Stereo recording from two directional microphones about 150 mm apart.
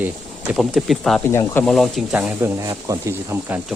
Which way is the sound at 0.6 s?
Centre (ahead or behind).